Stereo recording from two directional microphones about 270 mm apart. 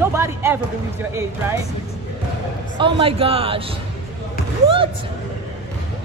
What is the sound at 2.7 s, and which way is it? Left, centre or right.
Speech, centre.